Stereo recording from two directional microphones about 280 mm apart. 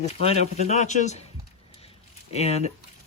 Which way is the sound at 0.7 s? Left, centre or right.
Left.